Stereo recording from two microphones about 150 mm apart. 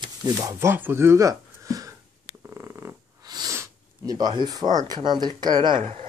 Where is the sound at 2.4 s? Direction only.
15° right (ahead or behind).